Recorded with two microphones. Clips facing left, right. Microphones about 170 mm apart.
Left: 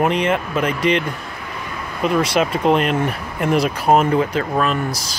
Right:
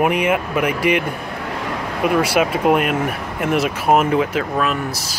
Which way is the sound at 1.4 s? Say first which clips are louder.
Right 6 dB; 80° right.